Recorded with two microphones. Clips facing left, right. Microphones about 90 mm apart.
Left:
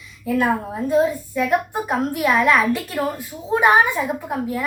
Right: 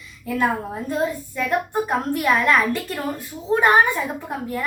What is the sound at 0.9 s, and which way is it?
A child's voice, 10° left (ahead or behind).